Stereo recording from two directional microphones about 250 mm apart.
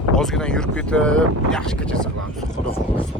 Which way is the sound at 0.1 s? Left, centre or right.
Centre.